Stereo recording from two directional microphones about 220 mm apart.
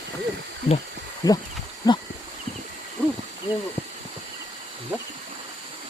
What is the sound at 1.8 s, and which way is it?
Wild animals, 15° left (ahead or behind).